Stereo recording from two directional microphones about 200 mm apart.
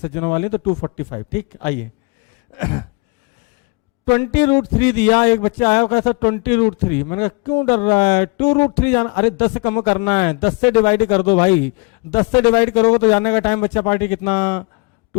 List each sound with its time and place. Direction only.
0.0 s speech: 15° left (ahead or behind)
2.6 s a sound: 20° left (ahead or behind)
4.1 s speech: 15° left (ahead or behind)